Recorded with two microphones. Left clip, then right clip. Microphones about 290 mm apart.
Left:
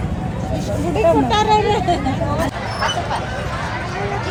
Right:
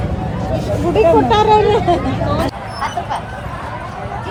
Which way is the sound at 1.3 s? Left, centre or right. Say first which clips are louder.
Right 4 dB; centre.